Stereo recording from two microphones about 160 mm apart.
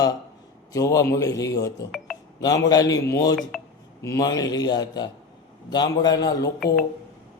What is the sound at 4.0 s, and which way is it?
A man's voice, 20° left (ahead or behind).